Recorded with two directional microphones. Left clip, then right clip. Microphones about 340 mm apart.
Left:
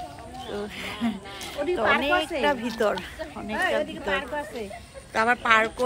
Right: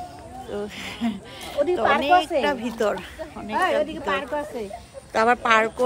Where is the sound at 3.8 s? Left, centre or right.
Right.